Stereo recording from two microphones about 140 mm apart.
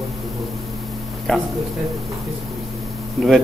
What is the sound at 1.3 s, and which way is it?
Speech, 5° left (ahead or behind).